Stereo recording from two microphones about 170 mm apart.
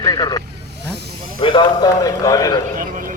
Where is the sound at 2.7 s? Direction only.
55° right (ahead or behind).